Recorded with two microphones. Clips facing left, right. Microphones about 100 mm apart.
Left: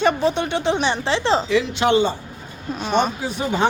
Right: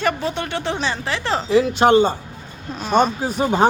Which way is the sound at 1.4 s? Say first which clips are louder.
Right 4 dB; 40° right (ahead or behind).